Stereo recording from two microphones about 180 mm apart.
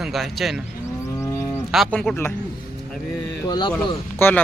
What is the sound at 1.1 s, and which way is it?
Cattle, 15° left (ahead or behind).